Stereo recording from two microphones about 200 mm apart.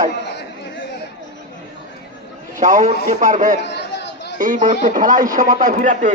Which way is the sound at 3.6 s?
60° left (ahead or behind).